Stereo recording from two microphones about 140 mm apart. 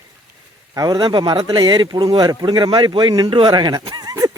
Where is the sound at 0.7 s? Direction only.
25° right (ahead or behind).